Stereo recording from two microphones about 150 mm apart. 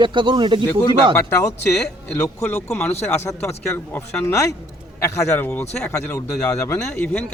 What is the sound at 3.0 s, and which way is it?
A man's voice, 15° left (ahead or behind).